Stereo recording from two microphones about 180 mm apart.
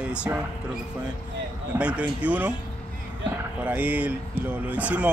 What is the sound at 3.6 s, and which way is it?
Speech, 10° right (ahead or behind).